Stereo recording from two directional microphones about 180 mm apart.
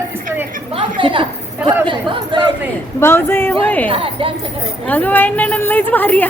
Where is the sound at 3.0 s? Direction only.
15° left (ahead or behind).